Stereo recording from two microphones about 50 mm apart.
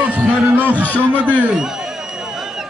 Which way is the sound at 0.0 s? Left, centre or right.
Right.